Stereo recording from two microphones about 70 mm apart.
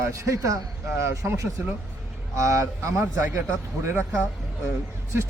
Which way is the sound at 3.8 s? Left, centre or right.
Right.